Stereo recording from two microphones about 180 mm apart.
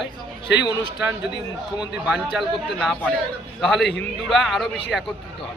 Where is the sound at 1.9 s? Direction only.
5° right (ahead or behind).